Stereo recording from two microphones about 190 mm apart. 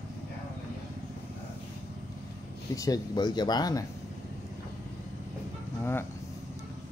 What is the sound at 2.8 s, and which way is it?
Speech, 20° left (ahead or behind).